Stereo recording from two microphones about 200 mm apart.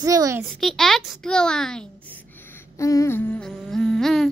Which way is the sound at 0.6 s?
Centre (ahead or behind).